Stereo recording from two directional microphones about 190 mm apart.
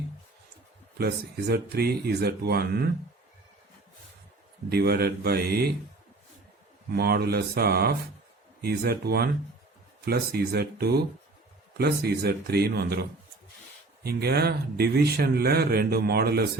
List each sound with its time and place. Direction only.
0.9 s speech: 55° right (ahead or behind)
4.7 s speech: 55° right (ahead or behind)
6.9 s speech: 55° right (ahead or behind)